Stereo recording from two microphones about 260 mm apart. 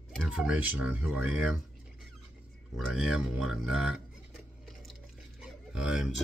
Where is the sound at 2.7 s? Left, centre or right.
Centre.